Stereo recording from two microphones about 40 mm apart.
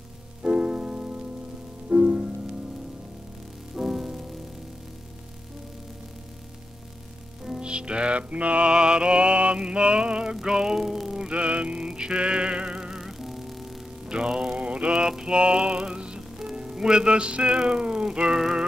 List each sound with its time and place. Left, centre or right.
0.4 s music: right
1.9 s music: right
3.8 s music: centre
7.6 s music: right; by 11.2 s centre
11.2 s music: right
12.9 s music: centre
14.0 s music: right
14.3 s mantra: centre
14.6 s mantra: right
14.9 s music: centre